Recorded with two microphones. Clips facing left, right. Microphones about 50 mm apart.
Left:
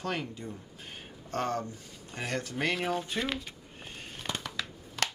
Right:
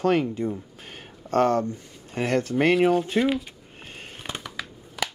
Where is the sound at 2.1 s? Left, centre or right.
Right.